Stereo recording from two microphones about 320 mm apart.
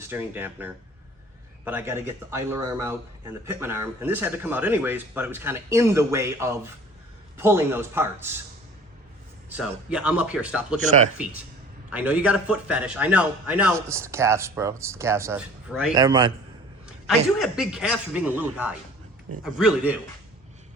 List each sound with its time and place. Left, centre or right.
0.1 s speech: centre
9.6 s a man's voice: centre
10.8 s speech: right
11.9 s a man's voice: centre
16.8 s a man's voice: centre